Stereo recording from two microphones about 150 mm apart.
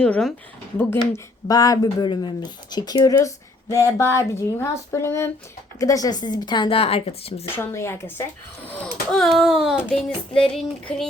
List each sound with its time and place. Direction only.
0.0 s child singing: 5° left (ahead or behind)
0.8 s speech: 15° left (ahead or behind); by 7.4 s 40° left (ahead or behind)
7.5 s speech: 15° left (ahead or behind)
8.6 s child singing: 10° left (ahead or behind)